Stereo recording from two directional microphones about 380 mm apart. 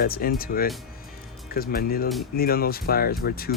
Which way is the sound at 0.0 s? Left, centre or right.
Left.